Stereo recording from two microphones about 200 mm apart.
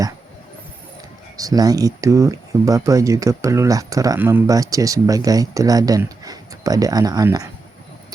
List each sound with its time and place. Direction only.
1.4 s speech: 20° right (ahead or behind)